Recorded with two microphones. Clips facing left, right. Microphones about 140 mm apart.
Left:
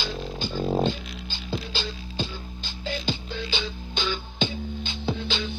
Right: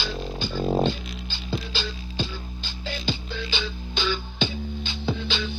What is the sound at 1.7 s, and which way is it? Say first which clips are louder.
Music: right 1 dB; 45° left (ahead or behind).